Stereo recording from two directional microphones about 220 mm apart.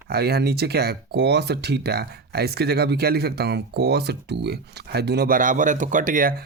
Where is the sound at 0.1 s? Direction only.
45° right (ahead or behind).